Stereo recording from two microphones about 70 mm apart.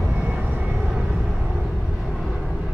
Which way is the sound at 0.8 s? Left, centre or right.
Centre.